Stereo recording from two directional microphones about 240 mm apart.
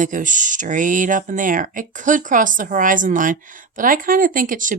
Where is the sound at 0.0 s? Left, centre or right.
Right.